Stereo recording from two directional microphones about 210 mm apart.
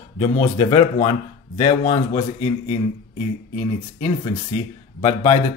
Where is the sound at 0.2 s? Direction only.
25° left (ahead or behind).